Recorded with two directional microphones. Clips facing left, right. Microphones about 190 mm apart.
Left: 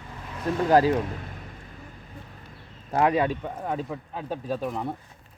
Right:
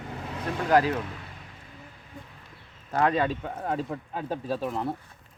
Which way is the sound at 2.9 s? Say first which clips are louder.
Left 2 dB; 20° left (ahead or behind).